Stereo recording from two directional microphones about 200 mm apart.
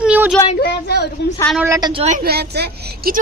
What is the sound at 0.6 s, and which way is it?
Speech, 55° left (ahead or behind).